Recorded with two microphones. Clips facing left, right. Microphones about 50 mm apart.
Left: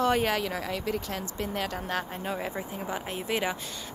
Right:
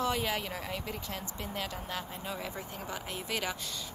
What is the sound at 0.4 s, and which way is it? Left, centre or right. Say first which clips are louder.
Speech: left 6 dB; left.